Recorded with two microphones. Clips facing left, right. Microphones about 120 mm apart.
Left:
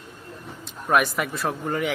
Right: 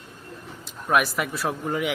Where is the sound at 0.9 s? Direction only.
Centre (ahead or behind).